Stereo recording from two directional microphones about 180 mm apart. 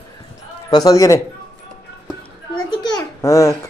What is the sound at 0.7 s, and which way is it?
Speech, 20° left (ahead or behind).